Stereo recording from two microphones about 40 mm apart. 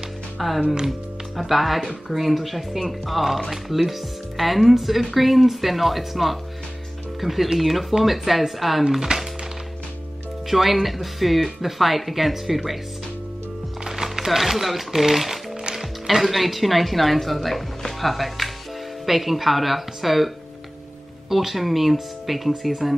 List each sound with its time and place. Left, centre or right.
0.4 s speech: centre
9.1 s speech: right
10.5 s speech: centre
13.8 s a sound: centre
15.0 s speech: centre
21.3 s speech: centre